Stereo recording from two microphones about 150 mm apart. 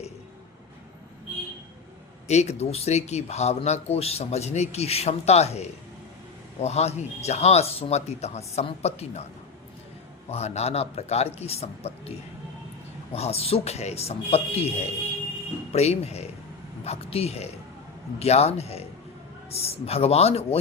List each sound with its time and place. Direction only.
2.2 s speech: 45° left (ahead or behind)
10.2 s speech: 45° left (ahead or behind)
13.1 s speech: 45° left (ahead or behind)
15.7 s a man's voice: 45° left (ahead or behind)